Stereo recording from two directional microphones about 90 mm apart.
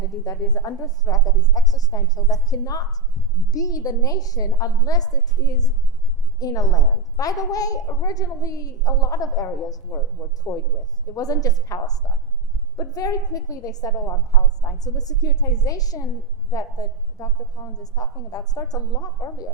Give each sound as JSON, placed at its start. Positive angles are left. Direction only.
{"t": 0.3, "sound": "a woman's voice", "side_deg": 45}